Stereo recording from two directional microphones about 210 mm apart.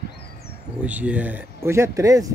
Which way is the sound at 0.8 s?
5° right (ahead or behind).